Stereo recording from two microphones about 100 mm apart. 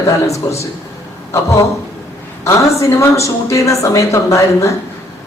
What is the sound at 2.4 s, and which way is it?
A woman's voice, 30° left (ahead or behind).